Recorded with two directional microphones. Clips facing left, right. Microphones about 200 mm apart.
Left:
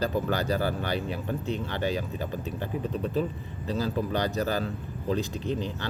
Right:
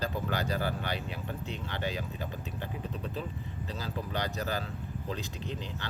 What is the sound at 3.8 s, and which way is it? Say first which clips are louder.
Speech: left 8 dB; 40° left (ahead or behind).